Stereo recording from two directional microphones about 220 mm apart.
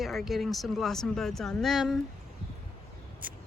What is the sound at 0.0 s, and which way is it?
Speech, centre (ahead or behind).